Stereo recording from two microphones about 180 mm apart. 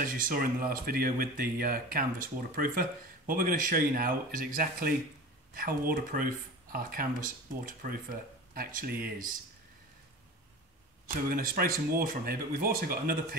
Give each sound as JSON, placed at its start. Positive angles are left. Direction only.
{"t": 0.0, "sound": "speech", "side_deg": -50}
{"t": 11.2, "sound": "speech", "side_deg": -55}